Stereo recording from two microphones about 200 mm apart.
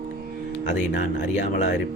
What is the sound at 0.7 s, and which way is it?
Speech, 40° left (ahead or behind).